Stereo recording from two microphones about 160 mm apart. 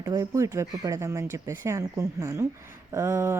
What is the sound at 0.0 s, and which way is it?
Speech, 20° right (ahead or behind).